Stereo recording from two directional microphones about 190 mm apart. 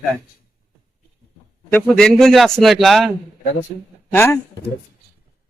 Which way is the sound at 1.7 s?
5° left (ahead or behind).